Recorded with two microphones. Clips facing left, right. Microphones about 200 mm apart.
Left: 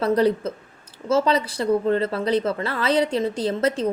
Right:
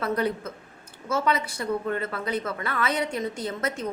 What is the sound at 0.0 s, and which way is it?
Speech, 30° left (ahead or behind).